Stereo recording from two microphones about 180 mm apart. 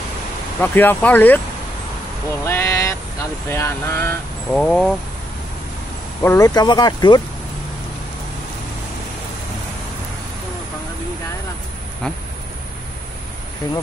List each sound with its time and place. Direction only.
0.6 s speech: 10° left (ahead or behind)
2.4 s a sound: 15° left (ahead or behind)
3.4 s speech: 15° left (ahead or behind)
6.2 s speech: 20° left (ahead or behind)
13.6 s speech: 25° left (ahead or behind)